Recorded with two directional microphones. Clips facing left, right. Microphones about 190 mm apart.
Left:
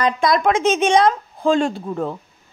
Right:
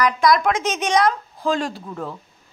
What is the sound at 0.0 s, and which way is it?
A woman's voice, 25° left (ahead or behind).